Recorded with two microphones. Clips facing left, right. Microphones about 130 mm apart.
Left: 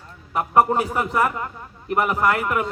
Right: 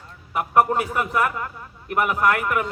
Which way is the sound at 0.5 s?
10° left (ahead or behind).